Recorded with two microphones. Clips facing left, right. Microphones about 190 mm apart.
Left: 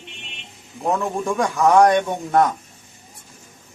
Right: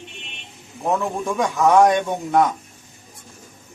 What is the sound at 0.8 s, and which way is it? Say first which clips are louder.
A man's voice: even; centre (ahead or behind).